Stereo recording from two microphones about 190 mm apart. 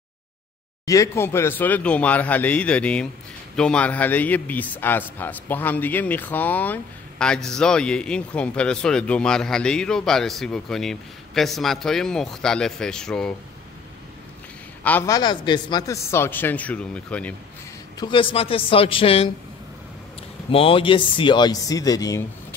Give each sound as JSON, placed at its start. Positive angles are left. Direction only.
{"t": 0.8, "sound": "a man's voice", "side_deg": 15}
{"t": 14.8, "sound": "a man's voice", "side_deg": 10}
{"t": 17.9, "sound": "speech", "side_deg": 25}
{"t": 20.5, "sound": "speech", "side_deg": 30}